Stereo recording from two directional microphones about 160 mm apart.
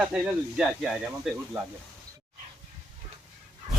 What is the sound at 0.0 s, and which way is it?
Speech, 5° right (ahead or behind).